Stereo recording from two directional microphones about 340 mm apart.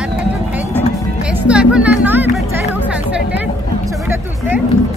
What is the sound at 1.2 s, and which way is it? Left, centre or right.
Music, centre.